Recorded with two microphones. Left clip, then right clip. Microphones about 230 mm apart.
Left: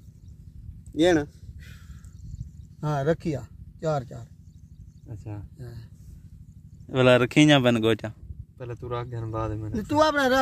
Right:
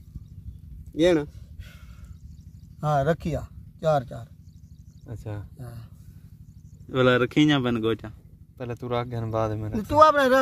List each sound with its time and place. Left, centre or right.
0.9 s speech: left
2.8 s speech: centre
5.0 s speech: right
5.6 s speech: centre
6.9 s speech: left
8.5 s speech: right
9.8 s speech: centre